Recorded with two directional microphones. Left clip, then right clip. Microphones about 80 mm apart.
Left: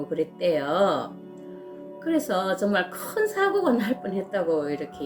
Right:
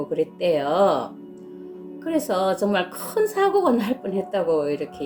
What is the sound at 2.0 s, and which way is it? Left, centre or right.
Speech, right.